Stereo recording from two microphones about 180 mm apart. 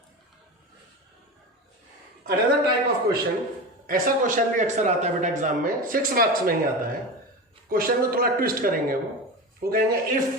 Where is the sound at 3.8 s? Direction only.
50° right (ahead or behind).